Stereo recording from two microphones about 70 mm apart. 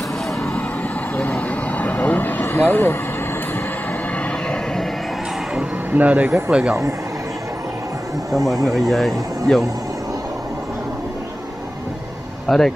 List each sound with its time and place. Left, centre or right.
1.1 s vehicle: left
5.9 s speech: right
8.6 s speech: centre
12.4 s speech: centre